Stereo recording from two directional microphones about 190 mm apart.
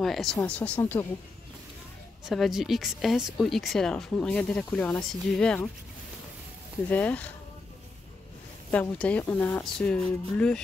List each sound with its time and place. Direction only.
0.0 s speech: centre (ahead or behind)
2.2 s speech: centre (ahead or behind)
6.9 s speech: 10° left (ahead or behind)
8.7 s speech: 5° left (ahead or behind)